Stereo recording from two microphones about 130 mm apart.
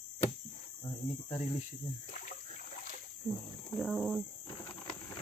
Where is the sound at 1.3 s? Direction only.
55° left (ahead or behind).